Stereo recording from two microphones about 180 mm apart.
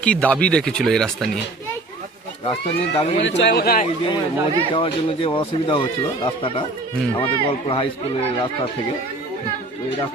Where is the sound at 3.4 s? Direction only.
65° left (ahead or behind).